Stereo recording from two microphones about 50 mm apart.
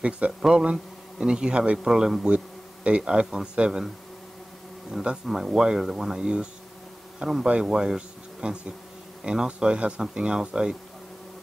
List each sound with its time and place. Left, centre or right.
0.4 s speech: centre
2.2 s bee: right
3.0 s speech: centre
5.2 s speech: centre